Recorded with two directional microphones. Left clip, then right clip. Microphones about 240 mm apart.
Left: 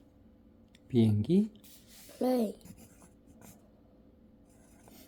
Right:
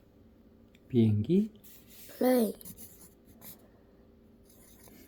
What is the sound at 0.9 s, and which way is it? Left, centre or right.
Speech, centre.